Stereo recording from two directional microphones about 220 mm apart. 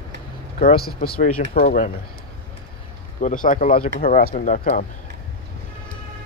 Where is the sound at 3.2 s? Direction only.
35° left (ahead or behind).